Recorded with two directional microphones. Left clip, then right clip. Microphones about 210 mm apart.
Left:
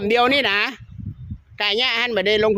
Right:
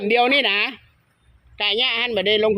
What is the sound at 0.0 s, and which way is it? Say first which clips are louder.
Speech: even; 10° left (ahead or behind).